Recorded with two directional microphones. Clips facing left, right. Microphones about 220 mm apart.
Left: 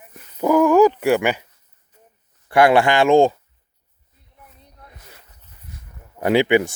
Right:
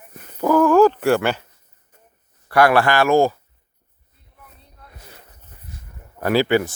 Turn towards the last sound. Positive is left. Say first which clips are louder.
# left 2 dB
turn(degrees=20)  # may be behind; listen again after turning